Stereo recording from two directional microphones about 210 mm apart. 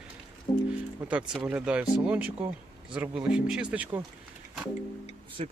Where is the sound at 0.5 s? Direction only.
25° left (ahead or behind).